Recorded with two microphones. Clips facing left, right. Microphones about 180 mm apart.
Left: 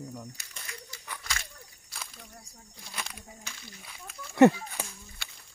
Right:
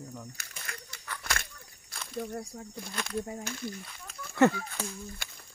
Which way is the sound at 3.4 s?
50° right (ahead or behind).